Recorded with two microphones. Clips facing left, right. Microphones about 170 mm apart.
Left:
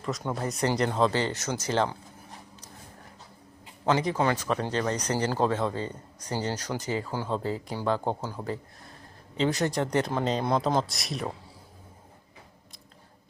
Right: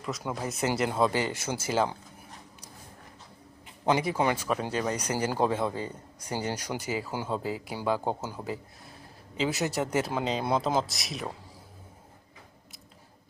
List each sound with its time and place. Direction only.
0.0 s speech: centre (ahead or behind)
3.8 s speech: 10° right (ahead or behind)